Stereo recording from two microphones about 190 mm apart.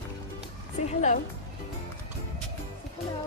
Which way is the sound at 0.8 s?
40° left (ahead or behind).